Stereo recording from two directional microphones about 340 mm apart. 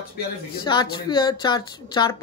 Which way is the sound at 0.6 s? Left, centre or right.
Centre.